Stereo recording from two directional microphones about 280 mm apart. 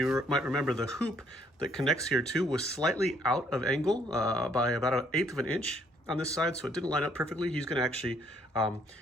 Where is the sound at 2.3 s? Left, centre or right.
Centre.